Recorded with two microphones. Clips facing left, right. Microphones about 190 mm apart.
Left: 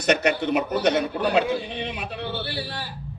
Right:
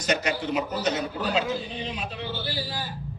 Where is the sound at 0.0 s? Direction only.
65° left (ahead or behind).